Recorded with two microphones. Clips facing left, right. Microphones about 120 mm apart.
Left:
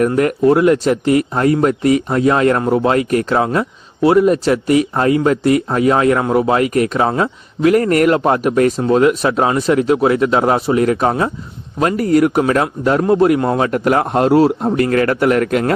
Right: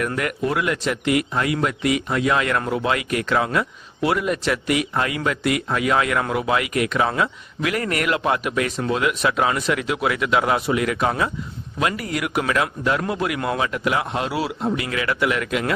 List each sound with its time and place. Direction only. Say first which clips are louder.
0.1 s speech: left 11 dB; 35° left (ahead or behind)
13.7 s a man's voice: left 8 dB; 45° left (ahead or behind)